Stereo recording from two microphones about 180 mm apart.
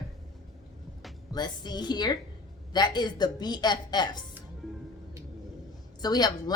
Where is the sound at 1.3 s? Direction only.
25° left (ahead or behind).